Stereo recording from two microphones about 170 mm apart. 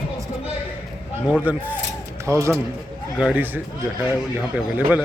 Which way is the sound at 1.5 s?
10° right (ahead or behind).